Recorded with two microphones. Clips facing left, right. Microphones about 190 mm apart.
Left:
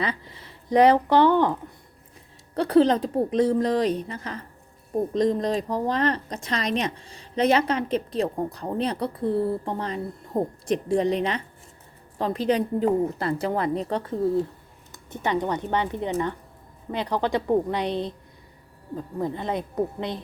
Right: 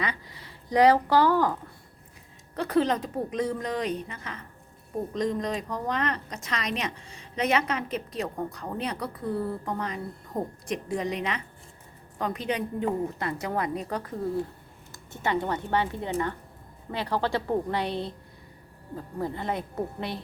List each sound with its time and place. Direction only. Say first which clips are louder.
0.0 s speech: left 4 dB; 30° left (ahead or behind)
2.6 s a woman's voice: left 6 dB; 35° left (ahead or behind)
19.2 s speech: left 3 dB; 20° left (ahead or behind)